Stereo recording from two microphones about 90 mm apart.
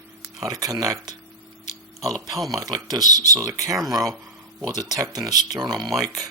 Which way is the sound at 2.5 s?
50° right (ahead or behind).